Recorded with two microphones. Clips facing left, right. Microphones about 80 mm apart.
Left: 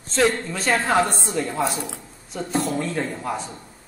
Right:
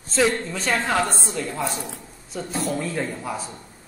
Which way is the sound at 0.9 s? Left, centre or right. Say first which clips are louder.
Left 3 dB; centre.